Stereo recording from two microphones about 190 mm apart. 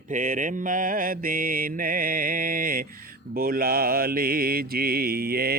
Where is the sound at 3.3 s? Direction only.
50° right (ahead or behind).